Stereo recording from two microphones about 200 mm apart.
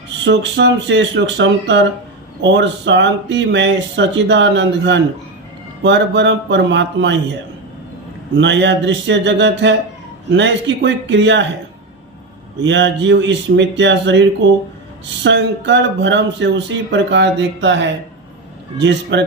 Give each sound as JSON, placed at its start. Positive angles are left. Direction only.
{"t": 0.3, "sound": "speech", "side_deg": -65}
{"t": 8.4, "sound": "speech", "side_deg": -65}
{"t": 12.6, "sound": "speech", "side_deg": -65}